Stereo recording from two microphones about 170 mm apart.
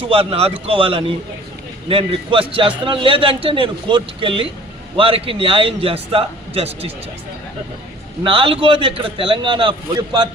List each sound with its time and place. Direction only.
0.1 s a man's voice: 35° right (ahead or behind)
8.2 s a man's voice: 35° right (ahead or behind)